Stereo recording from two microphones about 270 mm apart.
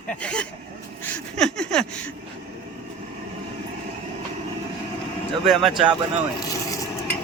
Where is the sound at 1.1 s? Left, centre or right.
Centre.